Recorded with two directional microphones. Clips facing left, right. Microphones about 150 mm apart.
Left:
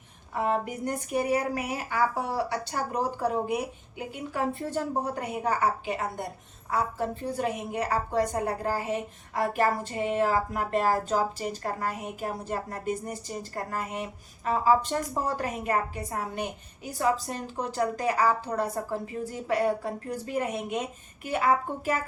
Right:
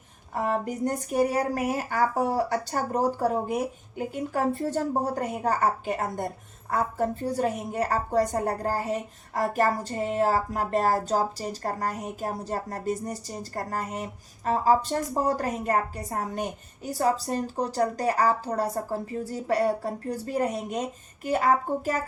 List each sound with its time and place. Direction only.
0.3 s speech: 40° right (ahead or behind)